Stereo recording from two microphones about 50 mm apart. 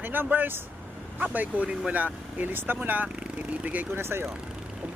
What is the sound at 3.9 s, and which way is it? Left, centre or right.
Speech, right.